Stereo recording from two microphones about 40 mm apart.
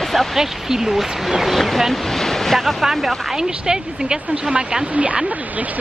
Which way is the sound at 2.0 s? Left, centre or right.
Centre.